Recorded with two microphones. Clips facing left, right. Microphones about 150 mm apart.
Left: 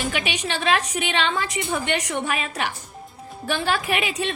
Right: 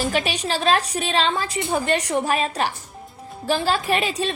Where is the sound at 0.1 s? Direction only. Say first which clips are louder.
Right 3 dB; 35° right (ahead or behind).